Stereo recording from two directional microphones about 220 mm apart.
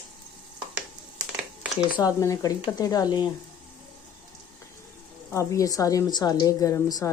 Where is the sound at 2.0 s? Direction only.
15° left (ahead or behind).